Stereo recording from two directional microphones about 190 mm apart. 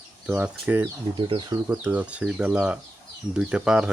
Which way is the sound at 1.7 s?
5° right (ahead or behind).